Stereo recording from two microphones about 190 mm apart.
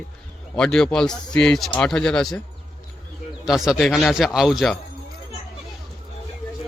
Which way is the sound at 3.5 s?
Centre (ahead or behind).